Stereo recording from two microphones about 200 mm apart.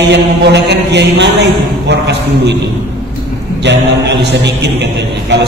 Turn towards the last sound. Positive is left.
turn(degrees=-60)  # may be behind; listen again after turning